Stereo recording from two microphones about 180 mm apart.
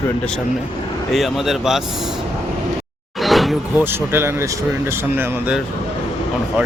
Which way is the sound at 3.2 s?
Centre (ahead or behind).